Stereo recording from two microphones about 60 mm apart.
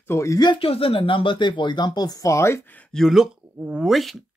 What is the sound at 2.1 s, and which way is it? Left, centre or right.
Speech, left.